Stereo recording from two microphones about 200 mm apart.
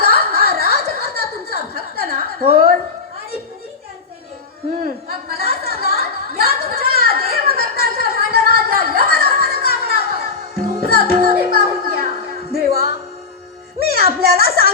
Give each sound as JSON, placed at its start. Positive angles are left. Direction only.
{"t": 0.3, "sound": "a sound", "side_deg": -50}
{"t": 4.8, "sound": "chatter", "side_deg": -50}
{"t": 10.8, "sound": "music", "side_deg": -50}